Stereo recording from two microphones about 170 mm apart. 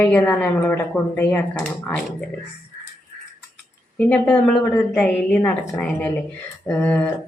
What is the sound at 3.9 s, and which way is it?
A woman's voice, 10° left (ahead or behind).